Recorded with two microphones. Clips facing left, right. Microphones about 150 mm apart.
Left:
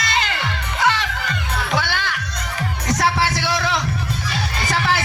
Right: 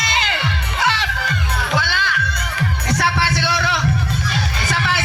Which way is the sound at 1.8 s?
50° left (ahead or behind).